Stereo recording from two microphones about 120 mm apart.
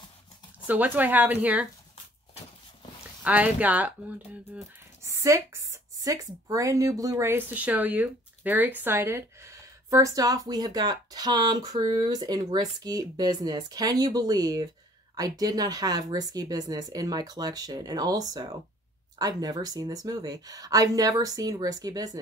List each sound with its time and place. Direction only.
0.7 s speech: 15° right (ahead or behind)
3.3 s speech: 10° right (ahead or behind)
5.0 s a woman's voice: 25° right (ahead or behind)